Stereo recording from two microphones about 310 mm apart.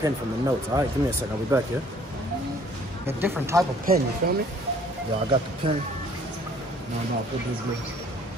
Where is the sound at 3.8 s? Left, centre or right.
Right.